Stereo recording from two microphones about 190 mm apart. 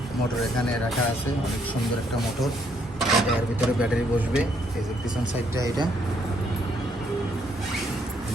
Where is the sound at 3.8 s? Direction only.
5° right (ahead or behind).